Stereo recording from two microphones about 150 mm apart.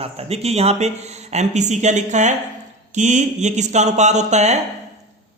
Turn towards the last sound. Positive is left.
turn(degrees=-50)  # may be behind; listen again after turning